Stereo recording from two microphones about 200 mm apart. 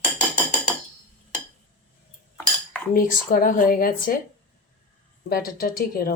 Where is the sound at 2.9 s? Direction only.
45° left (ahead or behind).